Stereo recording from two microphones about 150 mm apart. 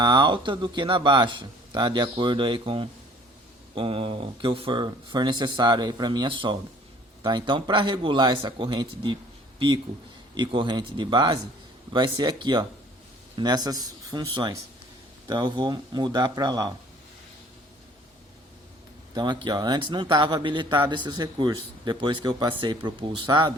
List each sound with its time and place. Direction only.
0.0 s speech: 30° right (ahead or behind)
19.1 s speech: 30° right (ahead or behind)